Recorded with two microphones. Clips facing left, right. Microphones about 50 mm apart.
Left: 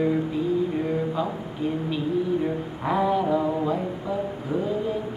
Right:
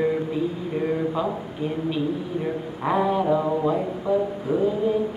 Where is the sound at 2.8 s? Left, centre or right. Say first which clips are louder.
Right 1 dB; centre.